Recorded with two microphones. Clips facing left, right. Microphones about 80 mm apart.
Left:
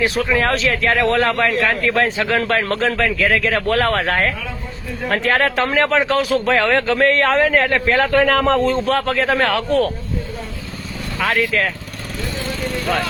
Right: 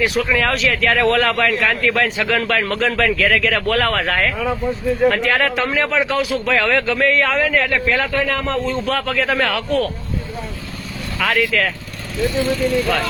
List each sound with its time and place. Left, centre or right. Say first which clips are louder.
0.0 s a man's voice: even; left
3.0 s a man's voice: right 1 dB; centre
3.4 s a man's voice: left 1 dB; left
8.1 s a man's voice: left 5 dB; left
8.7 s a man's voice: left 2 dB; left
11.2 s a man's voice: even; left